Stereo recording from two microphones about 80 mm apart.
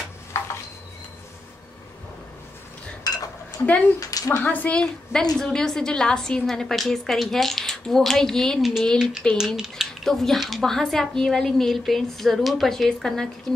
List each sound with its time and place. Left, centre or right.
0.3 s a sound: left
3.1 s dishes: left
4.0 s speech: left
4.4 s a woman's voice: left